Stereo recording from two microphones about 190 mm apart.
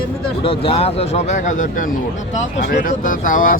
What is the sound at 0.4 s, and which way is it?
Speech, 30° left (ahead or behind).